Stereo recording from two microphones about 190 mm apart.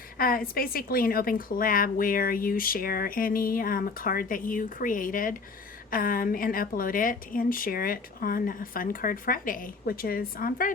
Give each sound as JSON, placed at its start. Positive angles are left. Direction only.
{"t": 0.2, "sound": "a woman's voice", "side_deg": 50}